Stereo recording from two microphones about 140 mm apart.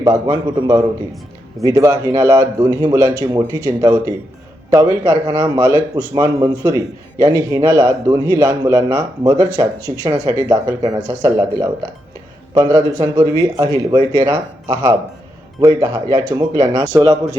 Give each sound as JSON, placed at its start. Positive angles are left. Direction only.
{"t": 0.0, "sound": "a man's voice", "side_deg": -25}